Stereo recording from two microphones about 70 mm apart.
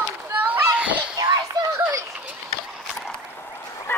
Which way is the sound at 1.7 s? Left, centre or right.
Right.